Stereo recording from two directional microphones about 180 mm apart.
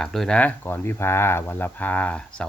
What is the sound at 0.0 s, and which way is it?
Speech, centre (ahead or behind).